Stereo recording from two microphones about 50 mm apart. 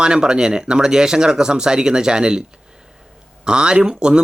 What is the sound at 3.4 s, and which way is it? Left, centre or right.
Speech, centre.